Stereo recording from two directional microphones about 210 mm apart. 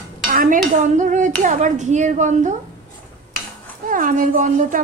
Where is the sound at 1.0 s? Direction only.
35° right (ahead or behind).